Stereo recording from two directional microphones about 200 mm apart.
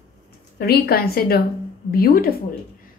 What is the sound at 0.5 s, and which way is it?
A woman's voice, 50° left (ahead or behind).